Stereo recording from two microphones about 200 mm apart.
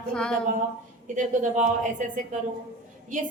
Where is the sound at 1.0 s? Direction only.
40° right (ahead or behind).